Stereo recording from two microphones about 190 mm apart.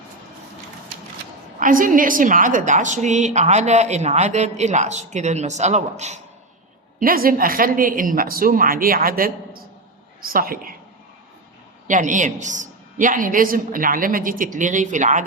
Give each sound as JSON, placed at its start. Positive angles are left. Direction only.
{"t": 1.5, "sound": "a woman's voice", "side_deg": -45}
{"t": 7.0, "sound": "a woman's voice", "side_deg": -50}
{"t": 11.9, "sound": "a woman's voice", "side_deg": -40}